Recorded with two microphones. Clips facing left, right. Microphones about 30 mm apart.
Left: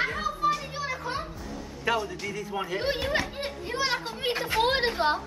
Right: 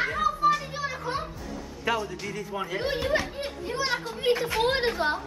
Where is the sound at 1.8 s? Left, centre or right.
Centre.